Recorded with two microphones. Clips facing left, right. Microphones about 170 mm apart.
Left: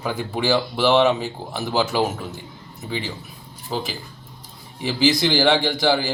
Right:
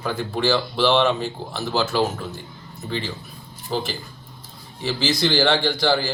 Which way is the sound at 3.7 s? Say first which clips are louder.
Right 1 dB; centre (ahead or behind).